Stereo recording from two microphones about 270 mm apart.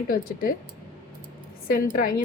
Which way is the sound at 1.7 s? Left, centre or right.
Left.